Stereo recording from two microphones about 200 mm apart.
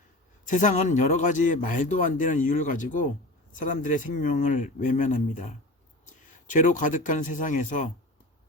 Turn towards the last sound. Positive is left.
turn(degrees=40)  # may be behind; listen again after turning